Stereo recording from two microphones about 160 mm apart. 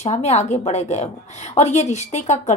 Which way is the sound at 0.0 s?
40° left (ahead or behind).